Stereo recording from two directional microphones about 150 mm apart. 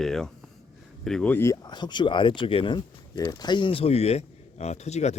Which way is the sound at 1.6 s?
30° left (ahead or behind).